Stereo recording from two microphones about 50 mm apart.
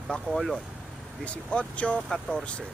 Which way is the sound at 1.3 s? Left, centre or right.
Left.